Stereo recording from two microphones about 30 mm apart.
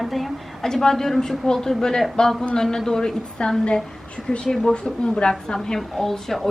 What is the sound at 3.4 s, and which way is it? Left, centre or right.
Speech, left.